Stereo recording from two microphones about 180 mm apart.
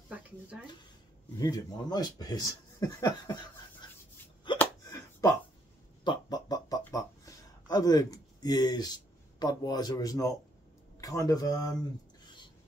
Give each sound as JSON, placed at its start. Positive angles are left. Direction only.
{"t": 0.1, "sound": "speech", "side_deg": -10}
{"t": 1.4, "sound": "a man's voice", "side_deg": 20}
{"t": 4.6, "sound": "a sound", "side_deg": 15}
{"t": 11.0, "sound": "speech", "side_deg": 20}